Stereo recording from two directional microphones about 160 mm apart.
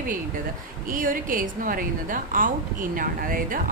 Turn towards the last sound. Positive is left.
turn(degrees=-60)  # may be behind; listen again after turning